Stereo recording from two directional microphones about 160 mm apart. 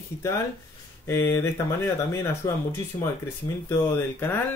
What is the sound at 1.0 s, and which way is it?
Speech, 15° left (ahead or behind).